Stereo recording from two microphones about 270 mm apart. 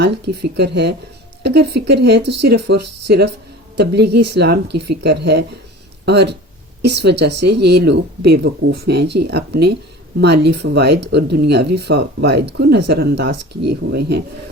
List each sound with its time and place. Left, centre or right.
0.5 s speech: right